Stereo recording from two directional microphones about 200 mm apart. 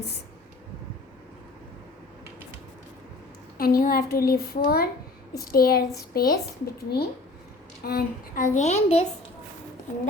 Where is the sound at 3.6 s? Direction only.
45° left (ahead or behind).